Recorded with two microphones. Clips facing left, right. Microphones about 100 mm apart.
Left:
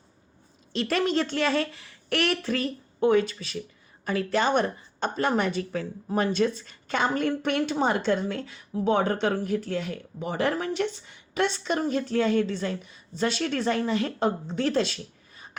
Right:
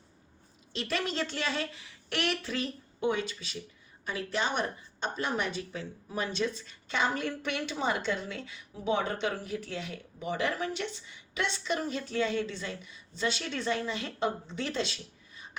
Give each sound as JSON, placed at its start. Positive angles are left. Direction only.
{"t": 0.7, "sound": "a woman's voice", "side_deg": 50}